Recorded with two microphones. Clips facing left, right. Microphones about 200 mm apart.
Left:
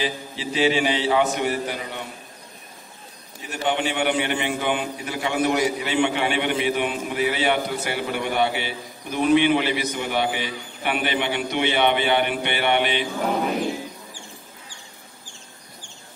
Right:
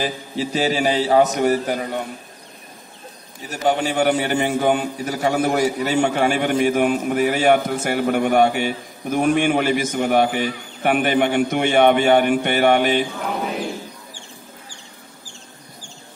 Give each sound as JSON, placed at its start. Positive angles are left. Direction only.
{"t": 0.0, "sound": "a man's voice", "side_deg": -45}
{"t": 3.4, "sound": "a man's voice", "side_deg": -40}